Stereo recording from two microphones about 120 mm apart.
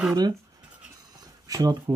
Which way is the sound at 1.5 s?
30° right (ahead or behind).